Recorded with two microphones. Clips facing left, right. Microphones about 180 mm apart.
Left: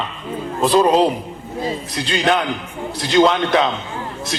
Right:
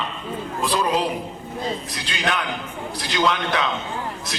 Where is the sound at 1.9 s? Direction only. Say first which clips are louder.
Left 8 dB; 25° left (ahead or behind).